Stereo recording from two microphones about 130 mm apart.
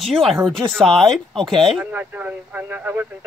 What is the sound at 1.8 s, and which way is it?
Speech, 10° right (ahead or behind).